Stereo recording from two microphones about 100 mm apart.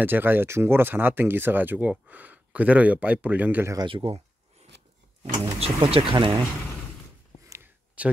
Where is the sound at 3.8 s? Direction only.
60° right (ahead or behind).